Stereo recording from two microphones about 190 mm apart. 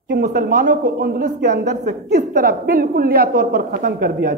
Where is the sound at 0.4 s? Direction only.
45° right (ahead or behind).